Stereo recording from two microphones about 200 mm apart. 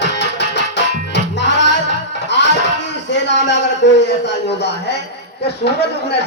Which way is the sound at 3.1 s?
60° left (ahead or behind).